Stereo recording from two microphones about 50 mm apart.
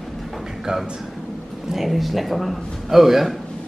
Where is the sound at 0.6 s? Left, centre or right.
Centre.